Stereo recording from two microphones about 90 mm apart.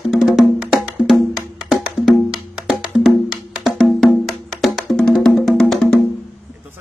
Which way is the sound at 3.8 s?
Centre (ahead or behind).